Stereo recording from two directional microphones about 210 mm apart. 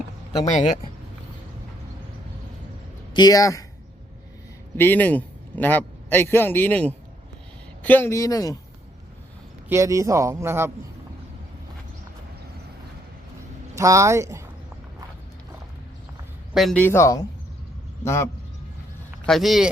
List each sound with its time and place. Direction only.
3.1 s speech: 20° left (ahead or behind)
4.8 s speech: 10° left (ahead or behind)
9.6 s speech: 15° right (ahead or behind)
13.7 s speech: 15° right (ahead or behind)
16.6 s speech: 5° left (ahead or behind)
19.2 s speech: centre (ahead or behind)